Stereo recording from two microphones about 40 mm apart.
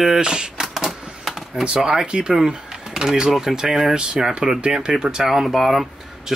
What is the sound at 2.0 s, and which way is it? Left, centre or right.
Speech, right.